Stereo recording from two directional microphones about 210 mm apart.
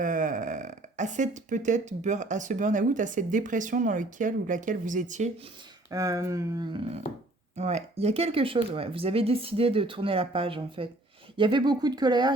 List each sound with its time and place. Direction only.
0.0 s speech: 40° right (ahead or behind)
5.9 s speech: 15° right (ahead or behind)